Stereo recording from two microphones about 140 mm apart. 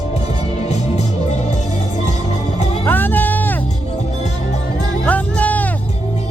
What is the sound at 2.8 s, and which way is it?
Music, 15° left (ahead or behind).